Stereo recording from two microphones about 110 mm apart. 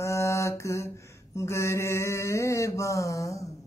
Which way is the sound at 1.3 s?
25° left (ahead or behind).